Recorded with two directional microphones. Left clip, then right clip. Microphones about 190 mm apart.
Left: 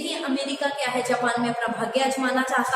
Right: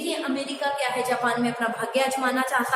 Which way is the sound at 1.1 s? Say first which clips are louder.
Left 1 dB; 15° right (ahead or behind).